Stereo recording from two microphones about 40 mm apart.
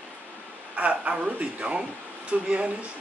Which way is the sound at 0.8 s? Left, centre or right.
Right.